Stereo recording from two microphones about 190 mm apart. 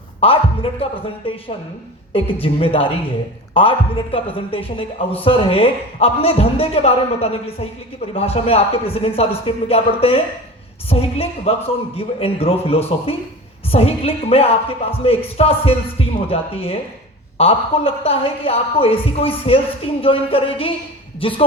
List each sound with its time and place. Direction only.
0.2 s a woman's voice: 30° left (ahead or behind)